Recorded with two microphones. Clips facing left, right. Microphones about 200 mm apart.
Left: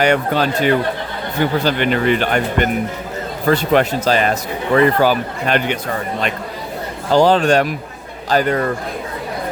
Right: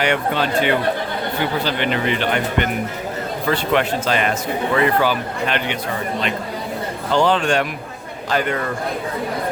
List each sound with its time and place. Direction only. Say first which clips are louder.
0.0 s speech: left 4 dB; 40° left (ahead or behind)
7.1 s speech: left 5 dB; 40° left (ahead or behind)